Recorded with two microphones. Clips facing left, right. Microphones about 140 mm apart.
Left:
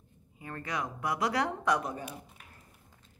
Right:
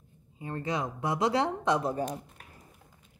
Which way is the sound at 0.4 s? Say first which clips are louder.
Right 4 dB; 25° right (ahead or behind).